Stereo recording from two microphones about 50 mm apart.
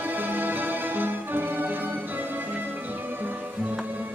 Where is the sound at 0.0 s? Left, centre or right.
Right.